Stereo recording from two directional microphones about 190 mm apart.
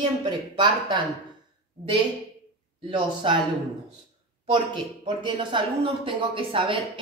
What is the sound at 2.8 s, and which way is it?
Speech, 25° right (ahead or behind).